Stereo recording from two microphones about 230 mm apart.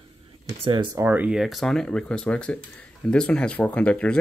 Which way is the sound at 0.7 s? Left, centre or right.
Centre.